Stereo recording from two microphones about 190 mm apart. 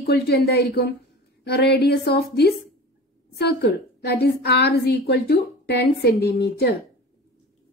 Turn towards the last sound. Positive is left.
turn(degrees=60)  # may be behind; listen again after turning